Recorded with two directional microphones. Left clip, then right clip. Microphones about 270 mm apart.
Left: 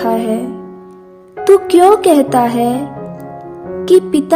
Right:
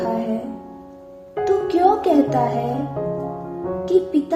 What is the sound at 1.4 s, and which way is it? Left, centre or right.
Speech, left.